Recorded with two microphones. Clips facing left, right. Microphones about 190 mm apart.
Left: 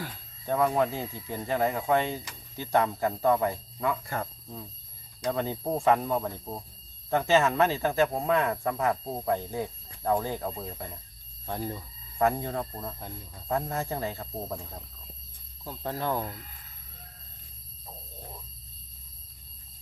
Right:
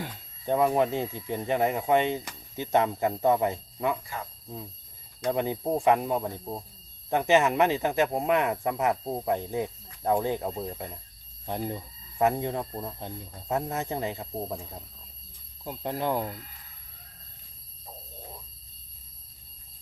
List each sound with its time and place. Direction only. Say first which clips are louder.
0.0 s speech: right 3 dB; 20° right (ahead or behind)
4.0 s speech: left 4 dB; 55° left (ahead or behind)
5.3 s speech: right 2 dB; 15° right (ahead or behind)
15.6 s speech: right 2 dB; 15° right (ahead or behind)